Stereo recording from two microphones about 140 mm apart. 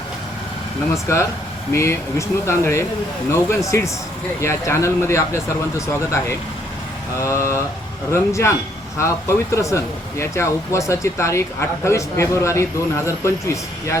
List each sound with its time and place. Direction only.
0.9 s speech: 20° left (ahead or behind)